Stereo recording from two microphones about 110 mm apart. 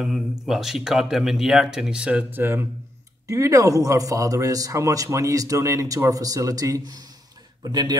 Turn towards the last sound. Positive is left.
turn(degrees=-40)  # may be behind; listen again after turning